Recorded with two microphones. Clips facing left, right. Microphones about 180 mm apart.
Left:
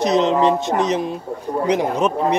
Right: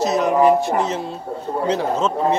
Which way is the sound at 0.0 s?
20° left (ahead or behind).